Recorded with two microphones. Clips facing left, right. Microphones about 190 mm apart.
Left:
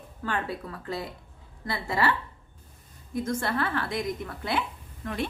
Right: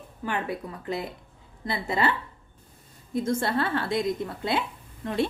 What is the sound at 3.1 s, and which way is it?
A woman's voice, 25° right (ahead or behind).